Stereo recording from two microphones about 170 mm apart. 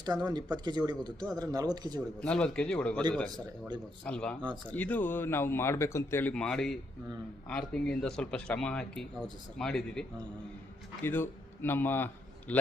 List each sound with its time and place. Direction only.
0.0 s speech: 25° right (ahead or behind)
2.2 s speech: 5° left (ahead or behind)
4.0 s a man's voice: 5° left (ahead or behind)